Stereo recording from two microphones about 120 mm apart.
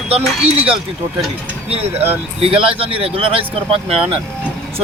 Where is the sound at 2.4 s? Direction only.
50° right (ahead or behind).